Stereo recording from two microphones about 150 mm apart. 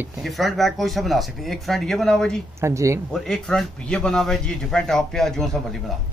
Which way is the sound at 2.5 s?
20° right (ahead or behind).